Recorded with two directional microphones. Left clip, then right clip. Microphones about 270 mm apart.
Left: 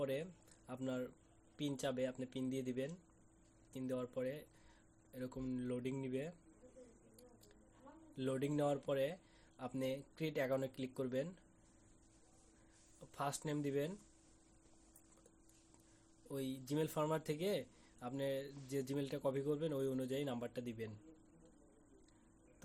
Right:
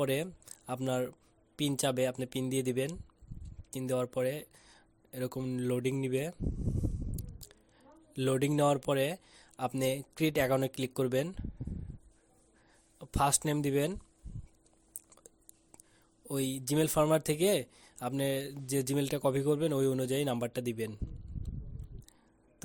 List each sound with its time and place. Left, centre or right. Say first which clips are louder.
0.0 s speech: right 9 dB; right
8.1 s speech: right 10 dB; right
13.0 s speech: right 13 dB; right
16.3 s speech: right 10 dB; right